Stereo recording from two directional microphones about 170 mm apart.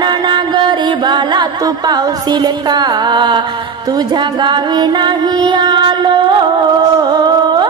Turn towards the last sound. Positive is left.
turn(degrees=-25)  # may be behind; listen again after turning